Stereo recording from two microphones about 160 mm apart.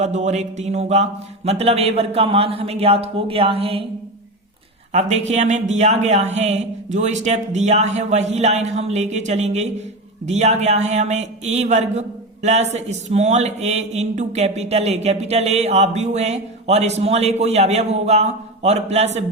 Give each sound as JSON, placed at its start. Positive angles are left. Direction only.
{"t": 0.0, "sound": "a man's voice", "side_deg": -45}
{"t": 4.9, "sound": "a man's voice", "side_deg": -45}